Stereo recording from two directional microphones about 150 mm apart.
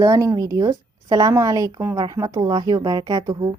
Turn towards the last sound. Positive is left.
turn(degrees=-25)  # may be behind; listen again after turning